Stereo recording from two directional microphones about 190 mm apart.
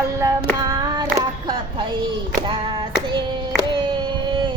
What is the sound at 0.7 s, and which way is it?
Child singing, 20° right (ahead or behind).